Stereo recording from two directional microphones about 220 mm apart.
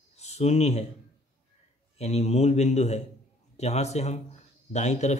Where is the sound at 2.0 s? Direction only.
30° left (ahead or behind).